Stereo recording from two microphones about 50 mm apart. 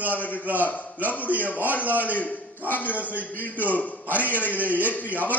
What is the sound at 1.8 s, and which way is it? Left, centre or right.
Speech, right.